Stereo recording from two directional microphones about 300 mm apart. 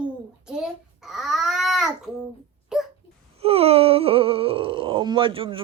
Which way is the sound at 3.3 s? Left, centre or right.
Centre.